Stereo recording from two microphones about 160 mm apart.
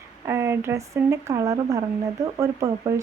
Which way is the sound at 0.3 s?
15° right (ahead or behind).